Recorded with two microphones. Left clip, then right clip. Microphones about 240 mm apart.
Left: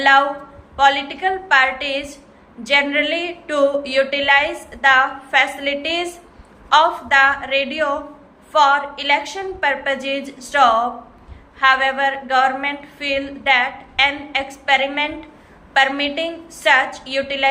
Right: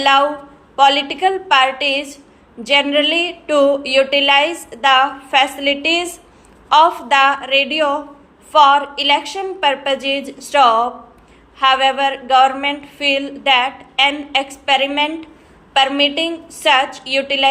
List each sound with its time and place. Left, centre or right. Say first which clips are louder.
0.0 s a woman's voice: right 1 dB; centre